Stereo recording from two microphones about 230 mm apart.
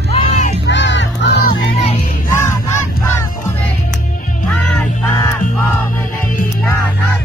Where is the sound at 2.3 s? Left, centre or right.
Centre.